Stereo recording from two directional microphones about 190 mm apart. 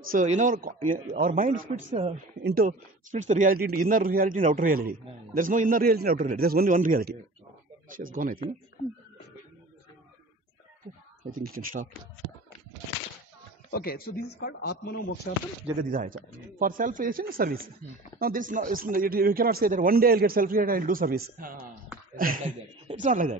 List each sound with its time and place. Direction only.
0.1 s a man's voice: 40° right (ahead or behind)
2.4 s a man's voice: 50° right (ahead or behind)
11.2 s a man's voice: 50° right (ahead or behind)
13.7 s speech: 55° left (ahead or behind)
15.8 s a man's voice: 45° right (ahead or behind)